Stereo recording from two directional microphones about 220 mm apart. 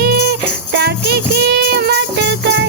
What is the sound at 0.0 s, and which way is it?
Jingle bell, 45° right (ahead or behind).